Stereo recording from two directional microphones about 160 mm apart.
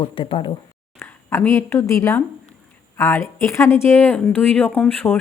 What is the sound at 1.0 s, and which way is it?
Speech, 15° left (ahead or behind).